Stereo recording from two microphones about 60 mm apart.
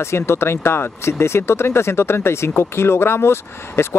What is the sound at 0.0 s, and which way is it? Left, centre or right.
Speech, left.